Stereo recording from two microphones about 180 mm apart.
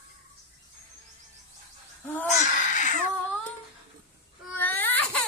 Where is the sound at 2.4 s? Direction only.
45° left (ahead or behind).